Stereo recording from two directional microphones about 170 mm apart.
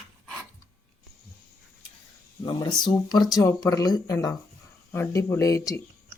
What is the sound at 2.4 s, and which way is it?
Speech, 30° left (ahead or behind).